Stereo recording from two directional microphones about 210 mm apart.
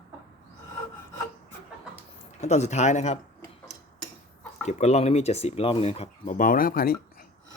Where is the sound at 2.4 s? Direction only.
35° left (ahead or behind).